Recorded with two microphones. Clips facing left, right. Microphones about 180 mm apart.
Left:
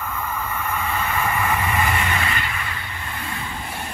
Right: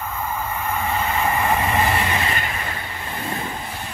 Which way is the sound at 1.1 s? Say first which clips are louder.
Right 2 dB; 35° right (ahead or behind).